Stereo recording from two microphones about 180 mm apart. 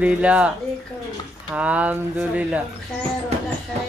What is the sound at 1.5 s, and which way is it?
Speech, 5° right (ahead or behind).